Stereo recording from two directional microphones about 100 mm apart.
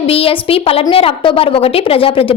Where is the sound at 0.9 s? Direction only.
65° left (ahead or behind).